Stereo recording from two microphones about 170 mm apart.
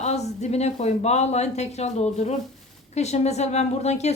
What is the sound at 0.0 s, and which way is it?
Speech, 40° left (ahead or behind).